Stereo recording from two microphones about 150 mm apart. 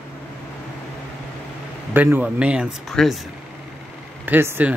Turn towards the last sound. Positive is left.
turn(degrees=-15)  # may be behind; listen again after turning